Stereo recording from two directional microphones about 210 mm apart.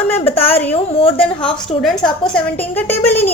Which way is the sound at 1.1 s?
5° left (ahead or behind).